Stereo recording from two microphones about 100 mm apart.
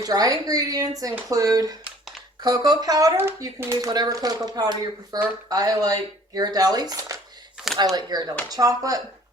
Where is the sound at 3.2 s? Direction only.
25° right (ahead or behind).